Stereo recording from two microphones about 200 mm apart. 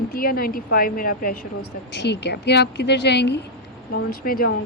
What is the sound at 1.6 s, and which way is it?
Speech, 60° left (ahead or behind).